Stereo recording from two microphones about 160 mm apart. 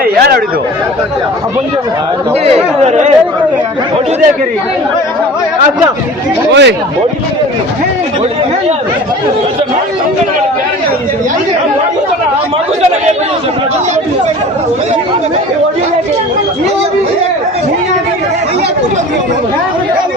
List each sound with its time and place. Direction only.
0.0 s chatter: 65° right (ahead or behind)
2.4 s speech: 40° right (ahead or behind)
6.5 s speech: 90° right